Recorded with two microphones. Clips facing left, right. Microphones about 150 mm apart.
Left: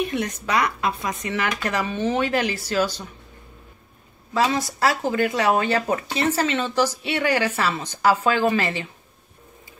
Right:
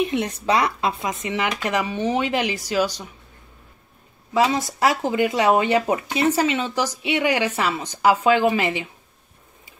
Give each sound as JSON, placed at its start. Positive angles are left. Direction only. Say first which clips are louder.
{"t": 0.0, "sound": "speech", "louder": "right 3 dB", "side_deg": -20}
{"t": 4.3, "sound": "speech", "louder": "right 2 dB", "side_deg": -15}